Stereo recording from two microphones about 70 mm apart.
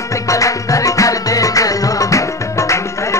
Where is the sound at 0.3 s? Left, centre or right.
Left.